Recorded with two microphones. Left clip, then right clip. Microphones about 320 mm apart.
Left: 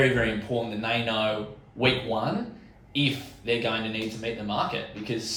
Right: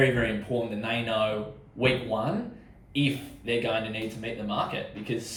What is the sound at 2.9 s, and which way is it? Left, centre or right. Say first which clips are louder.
Speech: left 2 dB; centre.